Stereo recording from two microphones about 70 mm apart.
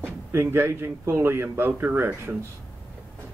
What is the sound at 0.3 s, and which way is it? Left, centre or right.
Speech, right.